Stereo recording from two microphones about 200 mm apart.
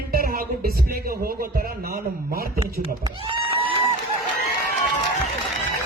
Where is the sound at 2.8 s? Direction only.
25° right (ahead or behind).